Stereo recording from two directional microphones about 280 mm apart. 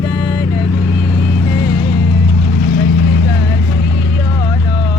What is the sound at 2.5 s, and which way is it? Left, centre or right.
Vehicle, left.